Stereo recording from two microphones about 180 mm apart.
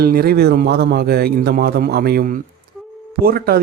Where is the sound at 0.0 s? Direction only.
60° right (ahead or behind).